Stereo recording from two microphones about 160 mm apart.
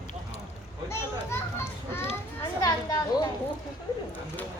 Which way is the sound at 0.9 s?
15° left (ahead or behind).